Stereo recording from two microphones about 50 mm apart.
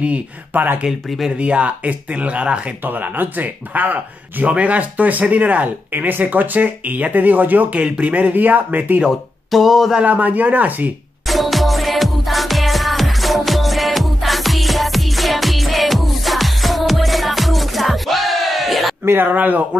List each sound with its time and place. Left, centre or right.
0.0 s speech: right
1.4 s speech: right
2.8 s speech: right
9.5 s a sound: centre
10.0 s speech: right
11.2 s music: centre
19.2 s speech: right